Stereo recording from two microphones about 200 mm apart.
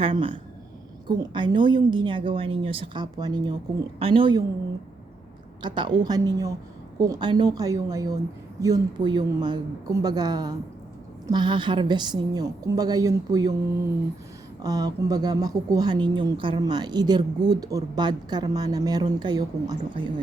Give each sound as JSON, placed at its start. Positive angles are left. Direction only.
{"t": 0.0, "sound": "speech", "side_deg": -25}
{"t": 5.6, "sound": "a woman's voice", "side_deg": -25}
{"t": 14.6, "sound": "speech", "side_deg": -15}